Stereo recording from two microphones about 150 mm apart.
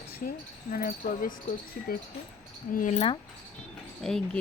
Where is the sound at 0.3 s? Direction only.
75° left (ahead or behind).